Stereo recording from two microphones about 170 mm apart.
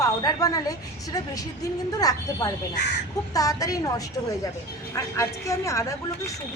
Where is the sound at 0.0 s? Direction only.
20° left (ahead or behind).